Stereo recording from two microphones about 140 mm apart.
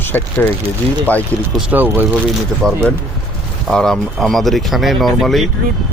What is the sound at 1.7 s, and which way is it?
Speech, 15° right (ahead or behind).